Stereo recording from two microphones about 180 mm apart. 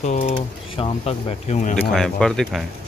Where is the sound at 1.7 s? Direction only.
5° left (ahead or behind).